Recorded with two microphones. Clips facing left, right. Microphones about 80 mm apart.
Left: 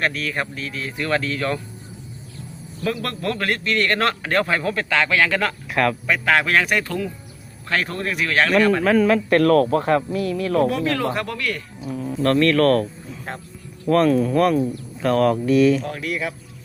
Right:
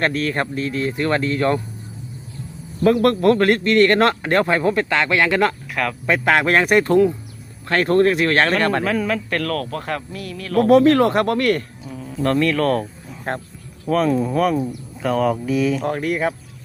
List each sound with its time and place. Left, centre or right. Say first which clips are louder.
0.0 s a man's voice: right 3 dB; right
2.8 s a man's voice: right 10 dB; right
5.7 s speech: left 3 dB; centre
6.1 s a man's voice: right 2 dB; right
8.8 s speech: left 4 dB; centre
9.4 s speech: left 8 dB; left
10.6 s speech: right 11 dB; right
12.2 s speech: left 2 dB; centre
13.3 s speech: right 8 dB; right
13.8 s speech: left 2 dB; centre
14.2 s speech: left 1 dB; centre
14.7 s speech: left 1 dB; centre
15.8 s speech: right 6 dB; right